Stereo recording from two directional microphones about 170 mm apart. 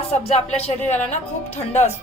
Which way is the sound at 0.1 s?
40° left (ahead or behind).